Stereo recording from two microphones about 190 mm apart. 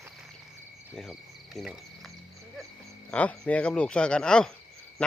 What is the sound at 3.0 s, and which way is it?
Speech, 5° left (ahead or behind).